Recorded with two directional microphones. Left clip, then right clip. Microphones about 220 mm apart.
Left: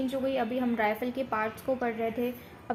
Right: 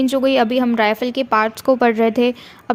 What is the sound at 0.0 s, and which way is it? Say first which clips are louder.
A woman's voice: right 14 dB; 50° right (ahead or behind).